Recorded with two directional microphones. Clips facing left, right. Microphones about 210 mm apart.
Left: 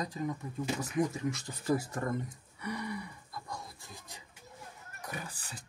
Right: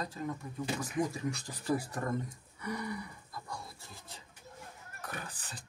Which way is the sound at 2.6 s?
20° left (ahead or behind).